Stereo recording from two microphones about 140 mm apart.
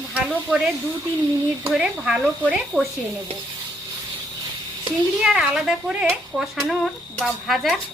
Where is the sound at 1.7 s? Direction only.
5° right (ahead or behind).